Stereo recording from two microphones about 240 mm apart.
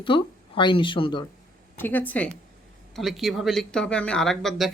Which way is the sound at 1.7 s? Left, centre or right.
Centre.